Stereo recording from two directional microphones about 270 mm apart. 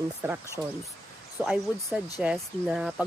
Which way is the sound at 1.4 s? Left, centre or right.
Centre.